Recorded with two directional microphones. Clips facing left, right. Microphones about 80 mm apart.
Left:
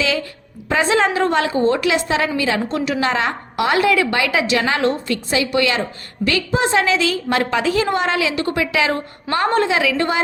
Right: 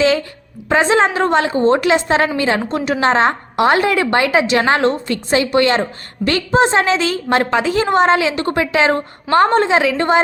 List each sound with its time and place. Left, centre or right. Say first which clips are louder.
0.7 s a woman's voice: right 3 dB; right